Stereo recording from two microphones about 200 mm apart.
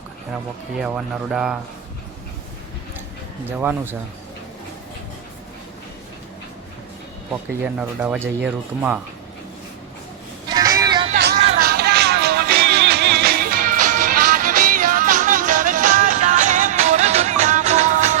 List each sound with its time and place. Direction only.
0.8 s speech: 5° right (ahead or behind)
3.6 s speech: 10° right (ahead or behind)
7.6 s speech: 5° right (ahead or behind)
10.5 s vehicle: 20° right (ahead or behind)
11.1 s a sound: 55° right (ahead or behind)
11.5 s music: 50° right (ahead or behind)